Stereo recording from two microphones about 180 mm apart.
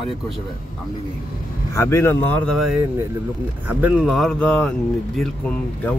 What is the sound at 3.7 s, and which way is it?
Speech, 10° right (ahead or behind).